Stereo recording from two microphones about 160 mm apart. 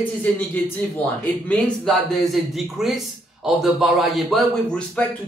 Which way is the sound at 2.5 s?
Centre (ahead or behind).